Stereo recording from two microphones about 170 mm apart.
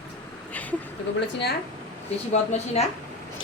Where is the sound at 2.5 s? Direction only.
40° left (ahead or behind).